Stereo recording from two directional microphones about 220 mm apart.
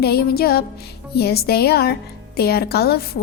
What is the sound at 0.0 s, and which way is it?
A woman's voice, 45° left (ahead or behind).